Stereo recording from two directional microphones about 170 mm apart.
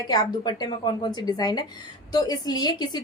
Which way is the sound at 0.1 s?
25° left (ahead or behind).